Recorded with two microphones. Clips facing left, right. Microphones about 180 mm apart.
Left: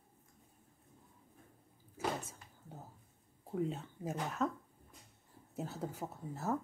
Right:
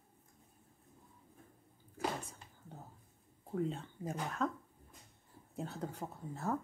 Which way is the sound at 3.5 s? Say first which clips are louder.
Even; 5° left (ahead or behind).